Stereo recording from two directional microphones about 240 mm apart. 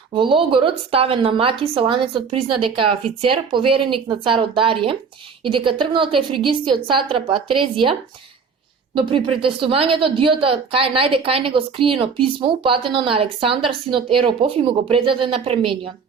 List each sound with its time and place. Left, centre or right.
0.1 s a woman's voice: right
9.0 s a woman's voice: right